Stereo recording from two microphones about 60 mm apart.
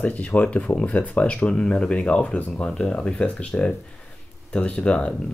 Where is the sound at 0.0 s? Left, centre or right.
Left.